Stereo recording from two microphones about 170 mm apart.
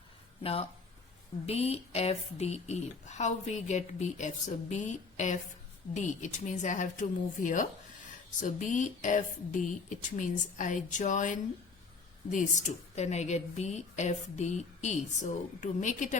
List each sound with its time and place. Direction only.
0.4 s speech: 35° left (ahead or behind)